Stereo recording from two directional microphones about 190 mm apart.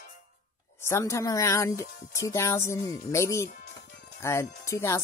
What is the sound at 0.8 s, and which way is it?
Speech, 15° left (ahead or behind).